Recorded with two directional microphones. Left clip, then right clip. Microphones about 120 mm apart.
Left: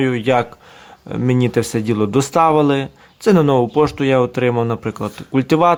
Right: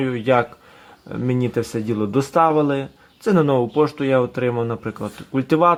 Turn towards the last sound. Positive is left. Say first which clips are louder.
# left 2 dB
turn(degrees=30)  # may be behind; listen again after turning